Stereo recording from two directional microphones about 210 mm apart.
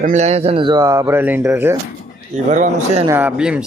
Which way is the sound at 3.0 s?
10° right (ahead or behind).